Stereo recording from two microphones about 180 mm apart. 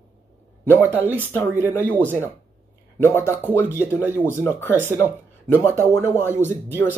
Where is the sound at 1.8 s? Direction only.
10° left (ahead or behind).